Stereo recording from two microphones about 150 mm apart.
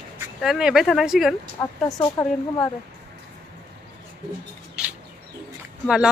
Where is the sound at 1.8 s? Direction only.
20° left (ahead or behind).